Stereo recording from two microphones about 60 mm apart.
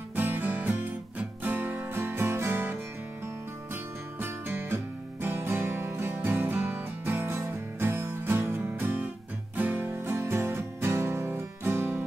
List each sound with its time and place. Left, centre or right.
0.1 s music: right